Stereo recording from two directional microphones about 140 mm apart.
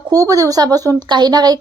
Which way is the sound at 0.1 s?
25° right (ahead or behind).